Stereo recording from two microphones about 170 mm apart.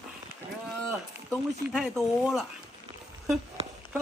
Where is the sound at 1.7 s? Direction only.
5° right (ahead or behind).